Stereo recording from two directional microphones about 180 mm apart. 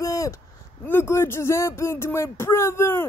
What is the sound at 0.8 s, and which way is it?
Speech, 15° left (ahead or behind).